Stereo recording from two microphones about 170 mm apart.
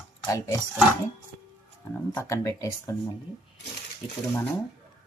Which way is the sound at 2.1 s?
15° left (ahead or behind).